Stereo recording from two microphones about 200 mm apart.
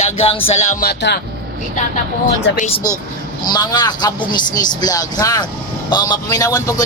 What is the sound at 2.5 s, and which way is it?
Speech, 60° left (ahead or behind).